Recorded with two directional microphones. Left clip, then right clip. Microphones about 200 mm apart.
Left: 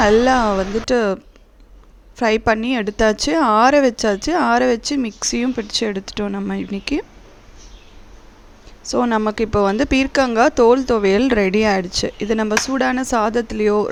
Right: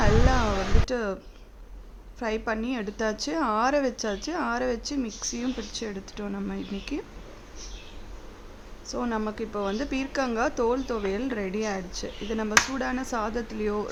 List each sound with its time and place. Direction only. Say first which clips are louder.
0.0 s a woman's voice: left 11 dB; 40° left (ahead or behind)
8.8 s speech: left 12 dB; 40° left (ahead or behind)